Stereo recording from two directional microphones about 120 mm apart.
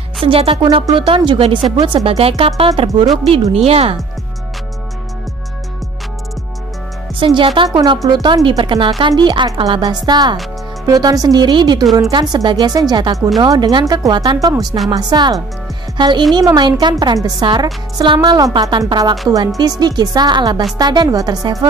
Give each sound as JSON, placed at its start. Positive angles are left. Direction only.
{"t": 0.2, "sound": "speech", "side_deg": -50}
{"t": 7.2, "sound": "speech", "side_deg": -50}
{"t": 7.7, "sound": "speech", "side_deg": -35}